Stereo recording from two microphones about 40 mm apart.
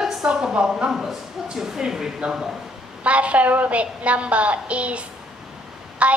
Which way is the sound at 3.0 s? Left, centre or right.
Right.